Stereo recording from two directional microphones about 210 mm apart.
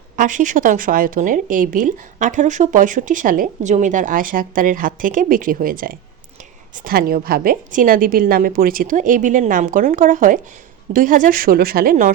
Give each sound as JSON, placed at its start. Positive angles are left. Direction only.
{"t": 0.2, "sound": "a woman's voice", "side_deg": -35}